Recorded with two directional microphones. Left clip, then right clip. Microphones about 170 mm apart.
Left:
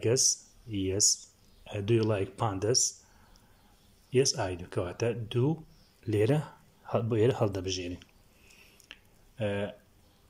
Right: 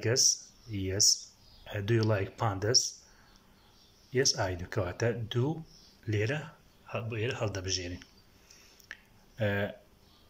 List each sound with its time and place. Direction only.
0.0 s speech: 15° left (ahead or behind)
4.1 s speech: 15° left (ahead or behind)
6.0 s speech: 25° left (ahead or behind)
8.8 s a sound: 15° left (ahead or behind)